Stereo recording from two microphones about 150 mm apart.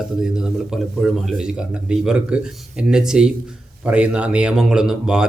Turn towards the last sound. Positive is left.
turn(degrees=-5)  # may be behind; listen again after turning